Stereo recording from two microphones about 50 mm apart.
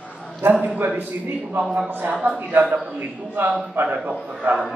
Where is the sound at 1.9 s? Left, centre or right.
Right.